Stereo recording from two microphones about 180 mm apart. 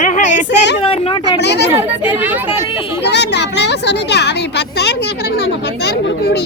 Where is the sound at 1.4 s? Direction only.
70° left (ahead or behind).